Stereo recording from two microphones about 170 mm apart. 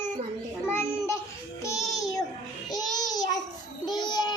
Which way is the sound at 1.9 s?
20° left (ahead or behind).